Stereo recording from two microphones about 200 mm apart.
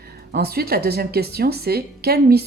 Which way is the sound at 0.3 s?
50° right (ahead or behind).